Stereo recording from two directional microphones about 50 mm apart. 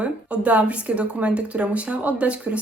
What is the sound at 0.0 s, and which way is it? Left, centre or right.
A woman's voice, right.